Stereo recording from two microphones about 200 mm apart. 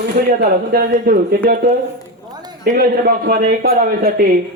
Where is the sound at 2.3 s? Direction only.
20° right (ahead or behind).